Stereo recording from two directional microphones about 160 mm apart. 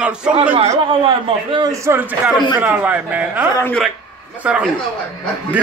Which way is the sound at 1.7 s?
15° right (ahead or behind).